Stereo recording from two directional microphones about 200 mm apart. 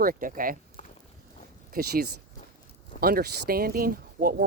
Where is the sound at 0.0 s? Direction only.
45° right (ahead or behind).